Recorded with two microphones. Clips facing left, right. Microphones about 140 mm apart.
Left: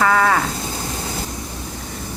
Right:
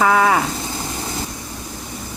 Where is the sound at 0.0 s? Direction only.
15° right (ahead or behind).